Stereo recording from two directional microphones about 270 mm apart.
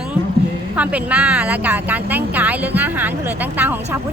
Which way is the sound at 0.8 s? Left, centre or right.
Centre.